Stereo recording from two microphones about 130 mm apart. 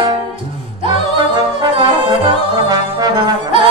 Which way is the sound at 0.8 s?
35° right (ahead or behind).